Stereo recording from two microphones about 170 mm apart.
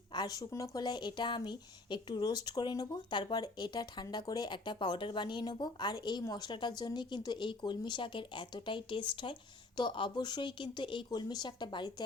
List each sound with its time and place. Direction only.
0.1 s a woman's voice: 25° left (ahead or behind)